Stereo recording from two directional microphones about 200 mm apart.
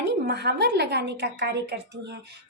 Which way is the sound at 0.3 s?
55° right (ahead or behind).